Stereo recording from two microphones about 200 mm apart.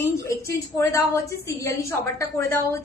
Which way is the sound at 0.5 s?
15° left (ahead or behind).